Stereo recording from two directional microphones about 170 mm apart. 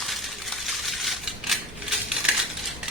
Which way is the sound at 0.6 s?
Centre (ahead or behind).